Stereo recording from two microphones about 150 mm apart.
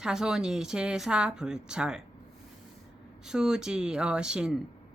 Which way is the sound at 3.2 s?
5° right (ahead or behind).